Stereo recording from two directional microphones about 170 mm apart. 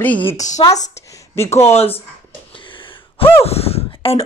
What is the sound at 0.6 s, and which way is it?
Speech, 25° left (ahead or behind).